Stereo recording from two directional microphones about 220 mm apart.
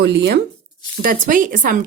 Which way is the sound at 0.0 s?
50° right (ahead or behind).